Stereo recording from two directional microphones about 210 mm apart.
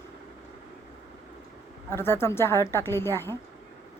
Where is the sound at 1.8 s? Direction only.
10° left (ahead or behind).